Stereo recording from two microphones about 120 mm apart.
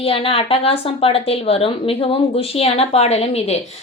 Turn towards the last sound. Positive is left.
turn(degrees=60)  # may be behind; listen again after turning